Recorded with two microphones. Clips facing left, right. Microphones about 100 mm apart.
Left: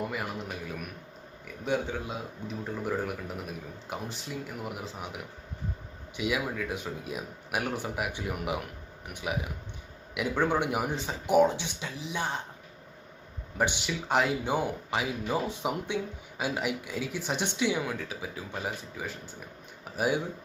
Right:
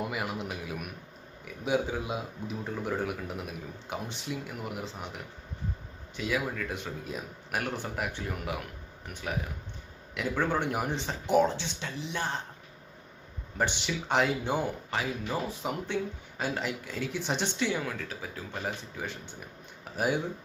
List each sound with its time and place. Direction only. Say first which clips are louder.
0.0 s a man's voice: right 1 dB; 5° right (ahead or behind)
6.1 s speech: left 1 dB; 15° left (ahead or behind)
6.7 s speech: left 1 dB; 5° left (ahead or behind)
11.9 s speech: even; 5° left (ahead or behind)
13.8 s speech: right 2 dB; 5° left (ahead or behind)
18.6 s speech: right 1 dB; 5° left (ahead or behind)